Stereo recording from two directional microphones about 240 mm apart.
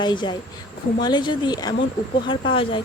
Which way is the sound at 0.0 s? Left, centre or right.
Centre.